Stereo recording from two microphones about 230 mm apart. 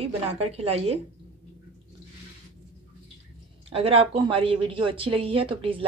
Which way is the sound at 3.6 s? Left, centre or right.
Right.